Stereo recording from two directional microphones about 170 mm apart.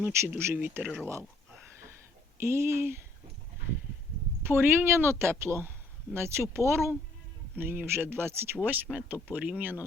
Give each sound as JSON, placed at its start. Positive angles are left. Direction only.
{"t": 0.0, "sound": "a woman's voice", "side_deg": -15}
{"t": 2.4, "sound": "a woman's voice", "side_deg": -15}
{"t": 4.4, "sound": "a woman's voice", "side_deg": -15}